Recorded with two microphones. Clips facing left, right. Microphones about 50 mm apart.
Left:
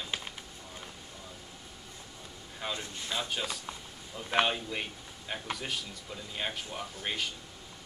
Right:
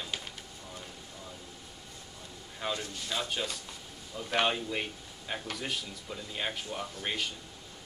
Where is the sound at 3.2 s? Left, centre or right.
Centre.